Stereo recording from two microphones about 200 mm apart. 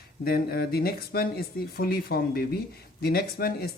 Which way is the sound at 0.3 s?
50° left (ahead or behind).